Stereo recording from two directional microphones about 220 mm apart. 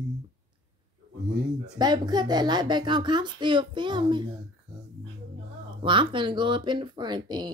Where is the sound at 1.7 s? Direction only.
20° right (ahead or behind).